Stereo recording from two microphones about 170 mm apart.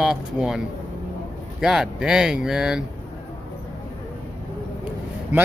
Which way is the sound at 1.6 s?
5° right (ahead or behind).